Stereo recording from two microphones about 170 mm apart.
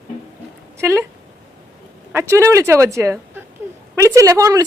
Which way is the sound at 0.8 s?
15° right (ahead or behind).